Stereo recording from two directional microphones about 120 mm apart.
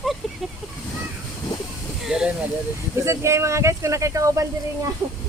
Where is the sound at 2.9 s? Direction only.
25° right (ahead or behind).